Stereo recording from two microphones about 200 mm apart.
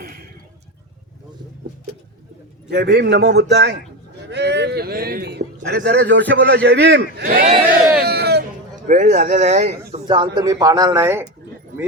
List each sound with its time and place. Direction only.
2.6 s a man's voice: 55° right (ahead or behind)
8.0 s a sound: 55° right (ahead or behind)
8.9 s speech: 40° right (ahead or behind); by 11.3 s 10° right (ahead or behind)